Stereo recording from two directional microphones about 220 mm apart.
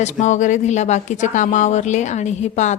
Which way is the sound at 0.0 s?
30° left (ahead or behind).